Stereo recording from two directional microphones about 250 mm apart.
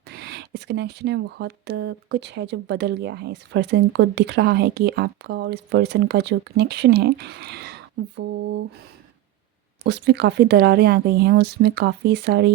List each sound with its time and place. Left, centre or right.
0.1 s speech: right
9.8 s speech: right